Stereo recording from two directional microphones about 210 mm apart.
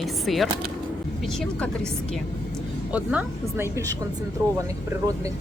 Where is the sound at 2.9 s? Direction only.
5° right (ahead or behind).